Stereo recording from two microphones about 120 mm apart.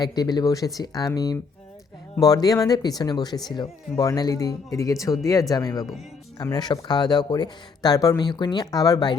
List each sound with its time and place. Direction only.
0.0 s speech: 35° left (ahead or behind)